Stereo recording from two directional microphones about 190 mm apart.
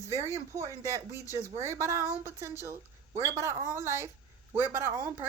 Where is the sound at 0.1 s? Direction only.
15° right (ahead or behind).